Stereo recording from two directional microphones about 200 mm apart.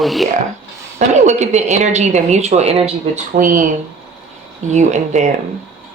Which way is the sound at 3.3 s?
40° right (ahead or behind).